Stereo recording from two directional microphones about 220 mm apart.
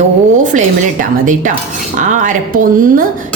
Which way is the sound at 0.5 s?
35° right (ahead or behind).